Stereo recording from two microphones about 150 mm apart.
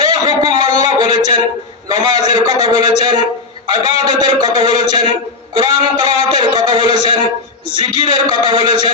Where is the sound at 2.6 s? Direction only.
30° right (ahead or behind).